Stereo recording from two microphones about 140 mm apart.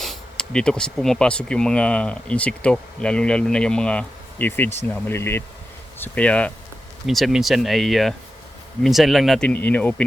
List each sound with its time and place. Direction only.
0.0 s speech: 5° left (ahead or behind)